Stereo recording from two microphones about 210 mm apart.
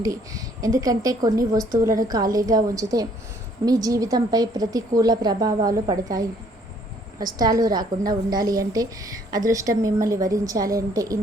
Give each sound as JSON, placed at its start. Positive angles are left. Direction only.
{"t": 0.0, "sound": "a woman's voice", "side_deg": -15}